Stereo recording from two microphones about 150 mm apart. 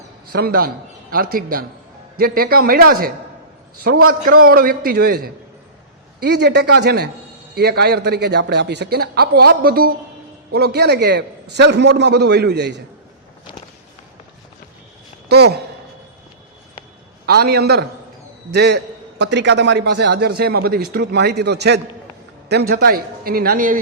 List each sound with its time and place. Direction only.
0.3 s a man's voice: 85° right
2.1 s a man's voice: 85° right
15.3 s a man's voice: 90° right
17.2 s a man's voice: 90° right
19.9 s a man's voice: 90° right; by 23.8 s 65° right (ahead or behind)